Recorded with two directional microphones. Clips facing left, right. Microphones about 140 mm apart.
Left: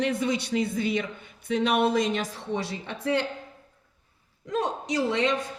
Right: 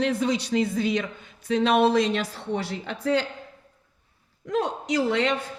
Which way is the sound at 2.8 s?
90° right.